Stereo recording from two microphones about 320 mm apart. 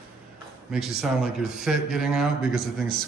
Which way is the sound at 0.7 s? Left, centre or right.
Centre.